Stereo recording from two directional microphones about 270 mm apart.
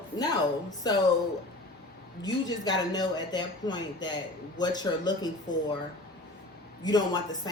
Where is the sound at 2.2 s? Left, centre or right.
Centre.